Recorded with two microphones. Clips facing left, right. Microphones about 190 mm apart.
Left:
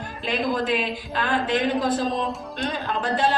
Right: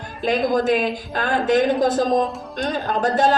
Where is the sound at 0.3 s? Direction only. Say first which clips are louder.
Right 6 dB; 40° right (ahead or behind).